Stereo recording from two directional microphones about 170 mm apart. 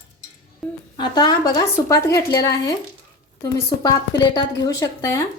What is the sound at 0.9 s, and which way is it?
A woman's voice, 25° left (ahead or behind).